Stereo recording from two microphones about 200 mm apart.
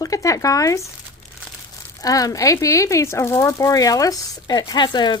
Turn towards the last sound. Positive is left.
turn(degrees=20)  # may be behind; listen again after turning